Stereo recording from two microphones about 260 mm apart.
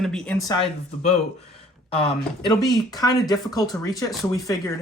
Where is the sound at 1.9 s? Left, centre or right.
Left.